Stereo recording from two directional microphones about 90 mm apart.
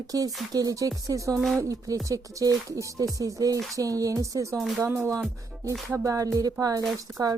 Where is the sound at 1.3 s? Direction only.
5° left (ahead or behind).